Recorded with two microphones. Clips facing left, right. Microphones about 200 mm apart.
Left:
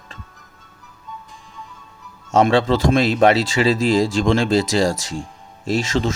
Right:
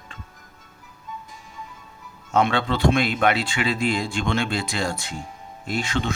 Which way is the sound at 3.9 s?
90° left.